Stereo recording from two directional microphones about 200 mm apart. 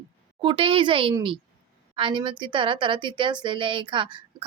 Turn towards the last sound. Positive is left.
turn(degrees=-25)  # may be behind; listen again after turning